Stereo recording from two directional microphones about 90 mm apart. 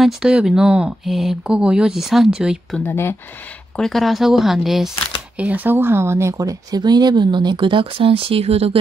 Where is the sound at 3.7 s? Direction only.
5° left (ahead or behind).